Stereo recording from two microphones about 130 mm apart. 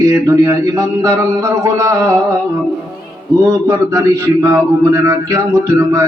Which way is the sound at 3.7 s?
25° right (ahead or behind).